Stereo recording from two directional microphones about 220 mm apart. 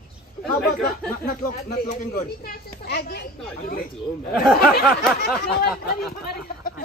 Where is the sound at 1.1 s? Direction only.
40° left (ahead or behind).